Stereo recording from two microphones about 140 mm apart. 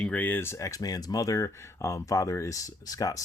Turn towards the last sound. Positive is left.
turn(degrees=25)  # may be behind; listen again after turning